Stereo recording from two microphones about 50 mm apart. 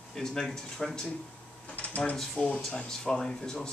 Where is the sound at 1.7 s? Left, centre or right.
Left.